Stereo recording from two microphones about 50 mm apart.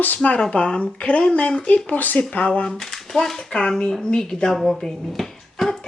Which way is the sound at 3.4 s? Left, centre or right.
Centre.